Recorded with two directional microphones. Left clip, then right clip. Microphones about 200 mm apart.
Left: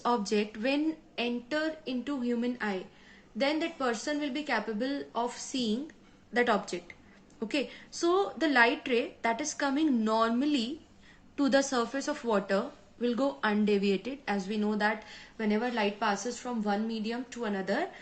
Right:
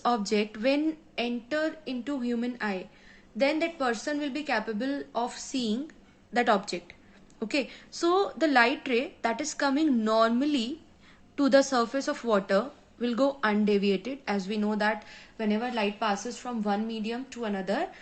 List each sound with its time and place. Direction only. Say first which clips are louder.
0.0 s a woman's voice: right 2 dB; 25° right (ahead or behind)